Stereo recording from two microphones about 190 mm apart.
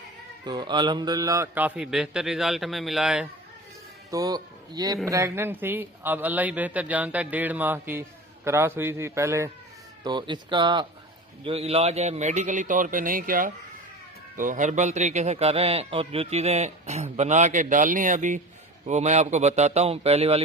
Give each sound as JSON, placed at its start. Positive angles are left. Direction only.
{"t": 0.4, "sound": "a man's voice", "side_deg": -25}
{"t": 4.1, "sound": "a man's voice", "side_deg": -20}